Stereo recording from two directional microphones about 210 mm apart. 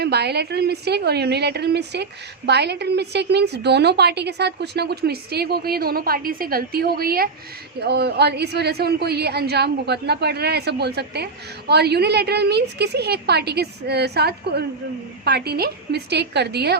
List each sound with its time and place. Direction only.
0.0 s a woman's voice: 50° right (ahead or behind)